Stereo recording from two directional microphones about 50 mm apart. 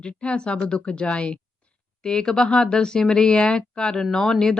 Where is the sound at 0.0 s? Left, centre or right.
Left.